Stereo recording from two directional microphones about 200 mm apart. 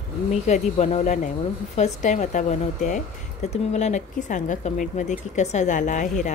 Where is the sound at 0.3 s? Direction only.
35° left (ahead or behind).